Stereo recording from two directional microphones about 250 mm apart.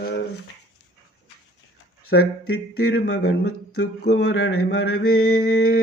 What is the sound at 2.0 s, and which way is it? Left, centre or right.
Mantra, left.